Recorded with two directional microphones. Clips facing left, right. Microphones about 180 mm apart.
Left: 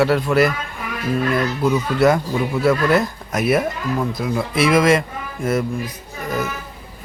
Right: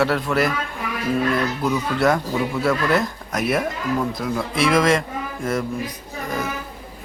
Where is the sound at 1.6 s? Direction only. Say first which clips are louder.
Left 5 dB; 5° left (ahead or behind).